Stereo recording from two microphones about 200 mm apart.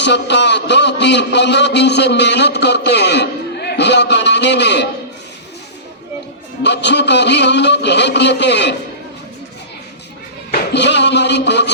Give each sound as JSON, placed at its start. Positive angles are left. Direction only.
{"t": 0.0, "sound": "a man's voice", "side_deg": 60}
{"t": 6.6, "sound": "a man's voice", "side_deg": 60}
{"t": 10.5, "sound": "music", "side_deg": 60}